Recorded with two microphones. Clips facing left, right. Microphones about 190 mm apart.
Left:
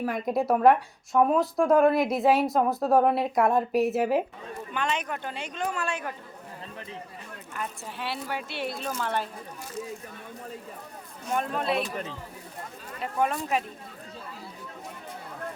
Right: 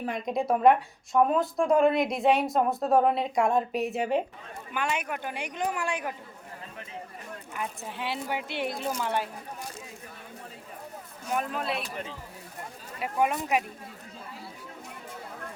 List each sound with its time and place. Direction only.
0.0 s speech: 5° left (ahead or behind)
4.7 s speech: 10° right (ahead or behind)
7.5 s speech: 15° right (ahead or behind)
11.3 s speech: 5° right (ahead or behind)
13.0 s speech: 10° right (ahead or behind)